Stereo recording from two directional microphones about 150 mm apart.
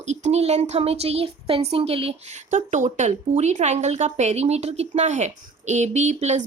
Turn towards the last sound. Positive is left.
turn(degrees=-50)  # may be behind; listen again after turning